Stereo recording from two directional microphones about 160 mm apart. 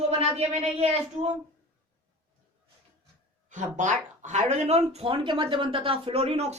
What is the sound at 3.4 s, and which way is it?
A woman's voice, 50° right (ahead or behind).